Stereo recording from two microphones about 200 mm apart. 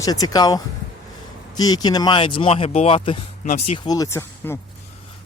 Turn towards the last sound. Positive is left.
turn(degrees=15)  # may be behind; listen again after turning